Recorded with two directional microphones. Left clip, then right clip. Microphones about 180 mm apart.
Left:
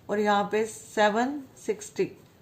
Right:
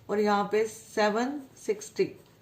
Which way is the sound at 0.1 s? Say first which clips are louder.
Left 1 dB; 30° left (ahead or behind).